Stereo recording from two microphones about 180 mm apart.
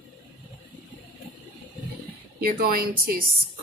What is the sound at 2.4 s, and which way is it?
Speech, 55° right (ahead or behind).